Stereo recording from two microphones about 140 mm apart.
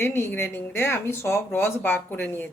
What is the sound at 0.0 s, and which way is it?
Speech, 15° left (ahead or behind).